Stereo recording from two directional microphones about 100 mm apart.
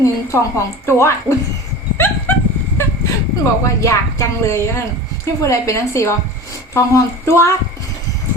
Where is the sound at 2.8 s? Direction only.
25° left (ahead or behind).